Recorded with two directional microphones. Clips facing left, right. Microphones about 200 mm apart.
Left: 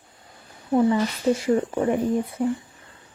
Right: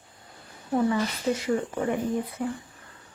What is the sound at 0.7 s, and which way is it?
Speech, 25° left (ahead or behind).